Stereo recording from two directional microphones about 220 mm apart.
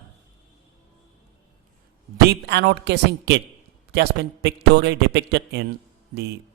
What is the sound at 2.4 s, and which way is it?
A man's voice, 50° right (ahead or behind).